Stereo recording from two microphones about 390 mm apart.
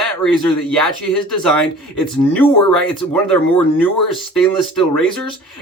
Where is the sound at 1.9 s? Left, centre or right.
Centre.